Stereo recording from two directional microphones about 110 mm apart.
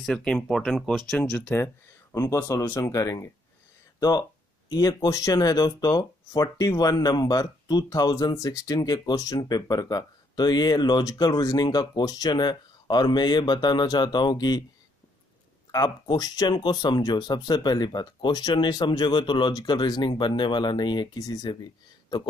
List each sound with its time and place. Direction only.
0.0 s speech: 5° left (ahead or behind)
2.1 s speech: 30° left (ahead or behind)
15.7 s speech: 35° left (ahead or behind)